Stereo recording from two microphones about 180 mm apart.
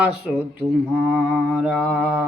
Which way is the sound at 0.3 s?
Centre (ahead or behind).